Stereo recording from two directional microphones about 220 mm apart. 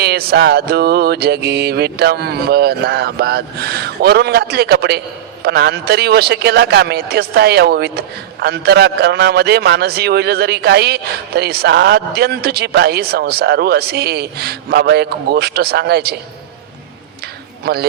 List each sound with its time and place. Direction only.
0.0 s speech: 45° right (ahead or behind)
17.7 s speech: 45° right (ahead or behind)